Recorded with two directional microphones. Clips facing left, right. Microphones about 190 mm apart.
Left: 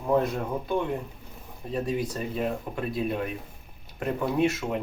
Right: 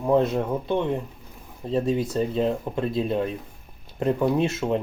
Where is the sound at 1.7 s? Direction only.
25° right (ahead or behind).